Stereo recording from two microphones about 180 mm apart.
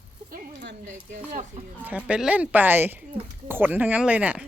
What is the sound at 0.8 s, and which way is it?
Speech, 45° right (ahead or behind).